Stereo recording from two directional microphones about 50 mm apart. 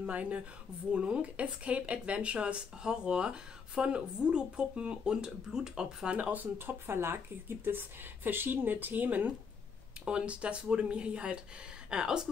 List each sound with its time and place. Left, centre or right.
0.0 s speech: right
6.1 s speech: right
10.0 s speech: right